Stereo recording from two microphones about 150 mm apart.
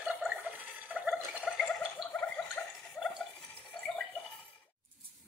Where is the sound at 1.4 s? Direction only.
Centre (ahead or behind).